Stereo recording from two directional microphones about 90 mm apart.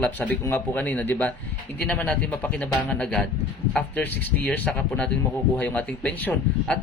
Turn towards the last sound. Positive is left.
turn(degrees=10)  # may be behind; listen again after turning